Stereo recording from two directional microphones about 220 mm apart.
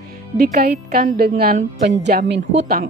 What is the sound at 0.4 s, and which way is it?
Speech, 45° right (ahead or behind).